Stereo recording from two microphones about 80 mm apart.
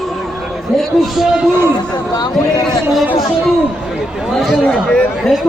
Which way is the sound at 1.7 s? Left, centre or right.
Left.